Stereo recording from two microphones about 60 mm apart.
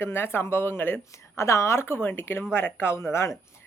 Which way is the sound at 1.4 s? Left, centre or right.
Left.